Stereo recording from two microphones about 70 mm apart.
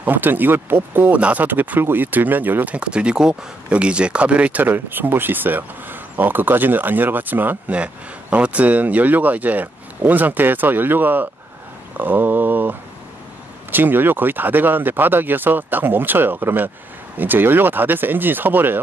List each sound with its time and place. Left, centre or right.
0.0 s speech: right